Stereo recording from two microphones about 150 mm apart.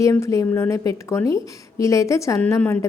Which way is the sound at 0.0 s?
20° left (ahead or behind).